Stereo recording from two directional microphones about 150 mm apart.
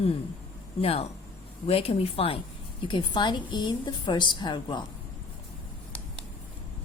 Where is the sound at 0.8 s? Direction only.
40° left (ahead or behind).